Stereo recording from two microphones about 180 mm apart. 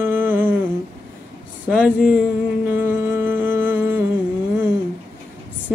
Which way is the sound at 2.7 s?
10° right (ahead or behind).